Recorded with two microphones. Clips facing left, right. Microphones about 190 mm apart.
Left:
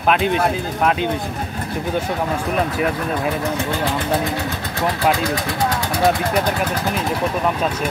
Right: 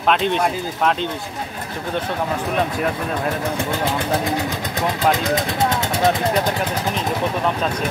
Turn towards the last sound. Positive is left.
turn(degrees=-25)  # may be behind; listen again after turning